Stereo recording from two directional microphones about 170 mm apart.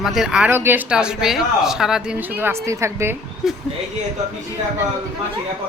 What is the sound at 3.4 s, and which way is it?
Speech, centre (ahead or behind).